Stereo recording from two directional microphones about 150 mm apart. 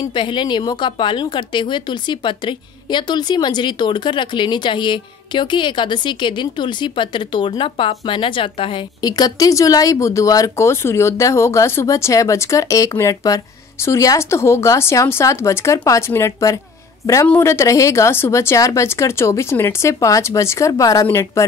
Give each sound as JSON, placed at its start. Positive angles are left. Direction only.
{"t": 0.0, "sound": "a woman's voice", "side_deg": 30}